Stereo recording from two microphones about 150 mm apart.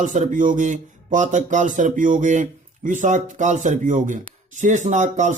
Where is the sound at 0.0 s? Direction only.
55° right (ahead or behind).